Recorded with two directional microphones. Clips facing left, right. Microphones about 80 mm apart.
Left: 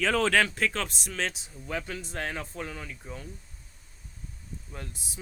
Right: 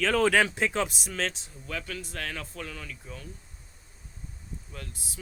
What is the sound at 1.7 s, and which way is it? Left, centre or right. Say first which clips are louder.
Speech: left 2 dB; left.